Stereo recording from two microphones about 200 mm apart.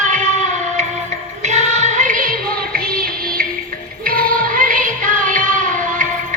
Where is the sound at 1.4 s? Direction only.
35° right (ahead or behind).